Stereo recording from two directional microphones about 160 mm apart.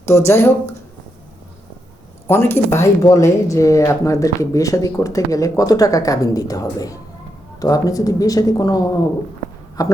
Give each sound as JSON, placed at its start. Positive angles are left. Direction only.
{"t": 0.0, "sound": "speech", "side_deg": 15}
{"t": 2.2, "sound": "speech", "side_deg": 15}